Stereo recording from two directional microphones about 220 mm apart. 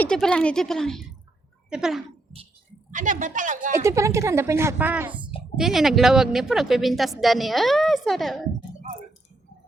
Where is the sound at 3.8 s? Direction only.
15° right (ahead or behind).